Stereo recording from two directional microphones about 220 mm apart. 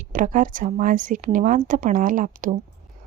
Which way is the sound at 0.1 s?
35° right (ahead or behind).